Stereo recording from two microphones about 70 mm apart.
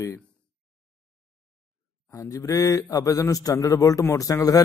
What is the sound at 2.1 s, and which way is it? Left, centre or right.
Speech, left.